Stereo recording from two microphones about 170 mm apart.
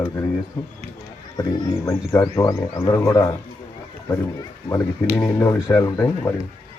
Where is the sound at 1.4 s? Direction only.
20° left (ahead or behind).